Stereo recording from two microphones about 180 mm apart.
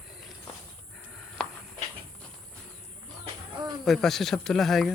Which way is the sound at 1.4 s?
5° left (ahead or behind).